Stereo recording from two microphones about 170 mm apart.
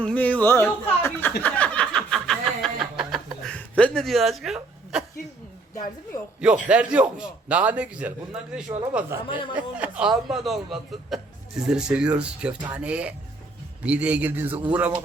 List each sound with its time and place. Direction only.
0.0 s speech: 5° left (ahead or behind)
1.4 s a sound: 10° left (ahead or behind)
6.1 s a man's voice: 25° left (ahead or behind)
6.7 s a man's voice: 5° right (ahead or behind)